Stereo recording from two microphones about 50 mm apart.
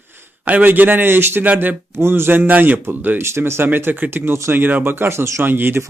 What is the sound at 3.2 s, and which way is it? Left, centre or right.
Speech, right.